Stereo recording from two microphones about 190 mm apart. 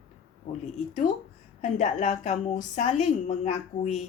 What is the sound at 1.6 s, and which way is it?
A woman's voice, 40° left (ahead or behind).